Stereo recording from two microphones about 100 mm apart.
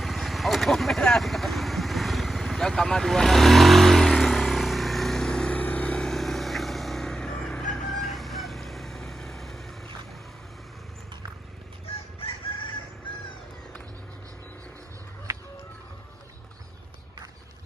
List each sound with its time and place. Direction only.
0.0 s vehicle: centre (ahead or behind)
12.5 s chicken: 65° left (ahead or behind)